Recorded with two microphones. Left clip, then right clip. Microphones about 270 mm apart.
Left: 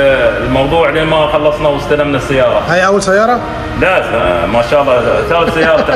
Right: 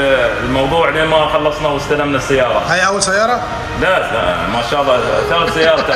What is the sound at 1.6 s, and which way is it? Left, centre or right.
A man's voice, centre.